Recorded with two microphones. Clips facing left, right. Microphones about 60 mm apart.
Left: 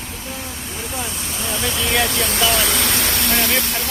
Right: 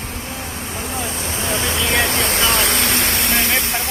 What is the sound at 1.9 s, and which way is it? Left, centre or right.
Vehicle, right.